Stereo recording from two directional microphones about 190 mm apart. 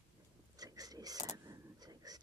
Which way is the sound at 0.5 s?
20° right (ahead or behind).